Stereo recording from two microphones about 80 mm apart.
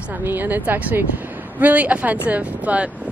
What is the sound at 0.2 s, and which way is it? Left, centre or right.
A woman's voice, right.